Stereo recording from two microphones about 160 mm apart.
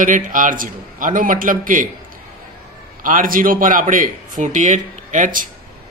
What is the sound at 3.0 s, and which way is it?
A man's voice, 60° right (ahead or behind).